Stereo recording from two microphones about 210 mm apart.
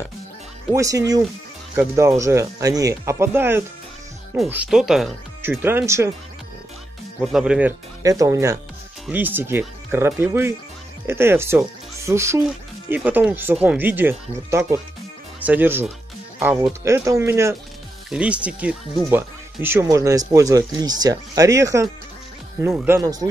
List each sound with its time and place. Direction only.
0.7 s speech: 15° right (ahead or behind)
7.2 s speech: 5° right (ahead or behind)
8.0 s speech: 15° right (ahead or behind)